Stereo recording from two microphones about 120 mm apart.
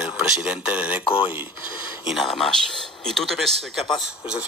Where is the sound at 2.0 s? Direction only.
Centre (ahead or behind).